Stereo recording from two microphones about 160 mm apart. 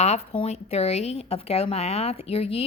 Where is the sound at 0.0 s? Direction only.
40° left (ahead or behind).